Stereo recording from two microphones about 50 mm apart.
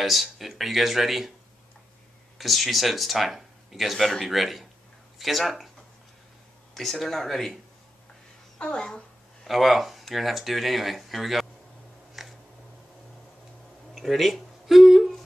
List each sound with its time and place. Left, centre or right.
0.0 s speech: centre
2.3 s speech: centre
6.7 s speech: centre
8.5 s a child's voice: centre
9.4 s speech: centre
12.2 s a sound: centre
13.9 s a sound: centre